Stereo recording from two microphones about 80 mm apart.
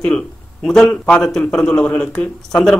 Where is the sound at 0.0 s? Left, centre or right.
Centre.